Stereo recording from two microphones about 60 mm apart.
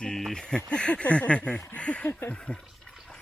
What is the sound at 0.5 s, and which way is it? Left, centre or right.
Speech, centre.